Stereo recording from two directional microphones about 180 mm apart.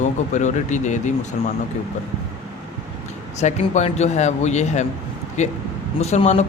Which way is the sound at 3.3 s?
40° left (ahead or behind).